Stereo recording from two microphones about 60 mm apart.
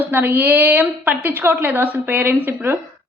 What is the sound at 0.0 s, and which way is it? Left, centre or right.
A man's voice, right.